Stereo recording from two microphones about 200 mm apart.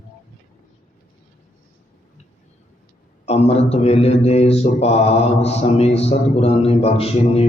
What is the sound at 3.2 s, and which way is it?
Mantra, 30° left (ahead or behind).